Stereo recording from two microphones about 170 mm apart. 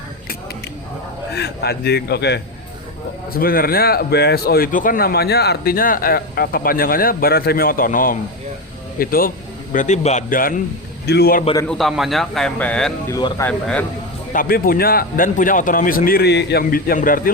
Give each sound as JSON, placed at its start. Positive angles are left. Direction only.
{"t": 1.4, "sound": "a man's voice", "side_deg": 75}
{"t": 3.3, "sound": "a man's voice", "side_deg": 60}
{"t": 9.7, "sound": "a man's voice", "side_deg": 45}
{"t": 11.0, "sound": "a man's voice", "side_deg": 70}
{"t": 11.6, "sound": "a man's voice", "side_deg": 0}
{"t": 13.1, "sound": "speech", "side_deg": 20}
{"t": 13.5, "sound": "speech", "side_deg": 5}
{"t": 14.3, "sound": "a man's voice", "side_deg": 60}